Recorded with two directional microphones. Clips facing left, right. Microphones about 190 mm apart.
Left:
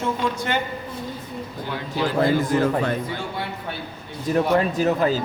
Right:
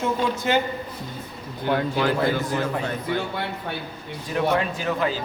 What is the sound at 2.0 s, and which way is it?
Speech, 55° right (ahead or behind).